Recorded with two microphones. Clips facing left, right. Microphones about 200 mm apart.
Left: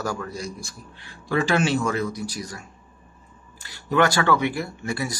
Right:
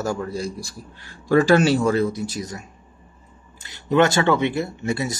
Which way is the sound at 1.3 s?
40° right (ahead or behind).